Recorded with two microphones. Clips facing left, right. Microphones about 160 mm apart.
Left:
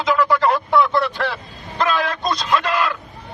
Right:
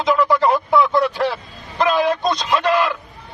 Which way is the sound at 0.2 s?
20° right (ahead or behind).